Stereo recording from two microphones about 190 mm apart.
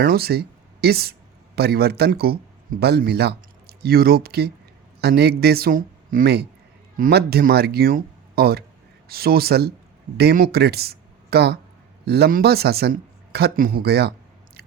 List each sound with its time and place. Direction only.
0.0 s speech: 55° right (ahead or behind)